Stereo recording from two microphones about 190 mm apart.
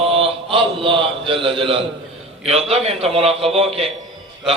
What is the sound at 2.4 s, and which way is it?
A man's voice, 30° right (ahead or behind).